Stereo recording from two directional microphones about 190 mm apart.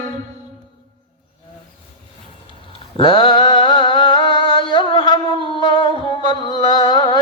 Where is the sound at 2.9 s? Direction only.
25° left (ahead or behind).